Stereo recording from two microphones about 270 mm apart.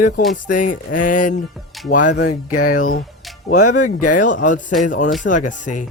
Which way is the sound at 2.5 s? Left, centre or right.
Left.